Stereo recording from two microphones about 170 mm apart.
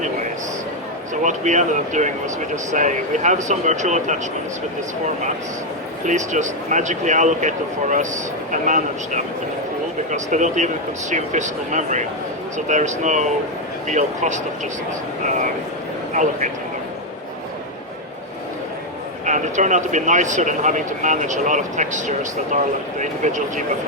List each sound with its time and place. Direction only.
1.2 s speech: 45° right (ahead or behind)
6.1 s speech: 45° right (ahead or behind)
16.1 s speech: 45° right (ahead or behind)
19.2 s speech: 45° right (ahead or behind)